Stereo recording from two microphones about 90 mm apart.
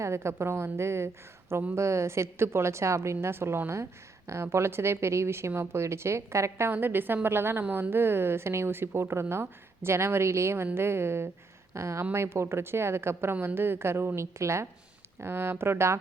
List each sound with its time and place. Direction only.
0.0 s a woman's voice: 30° right (ahead or behind)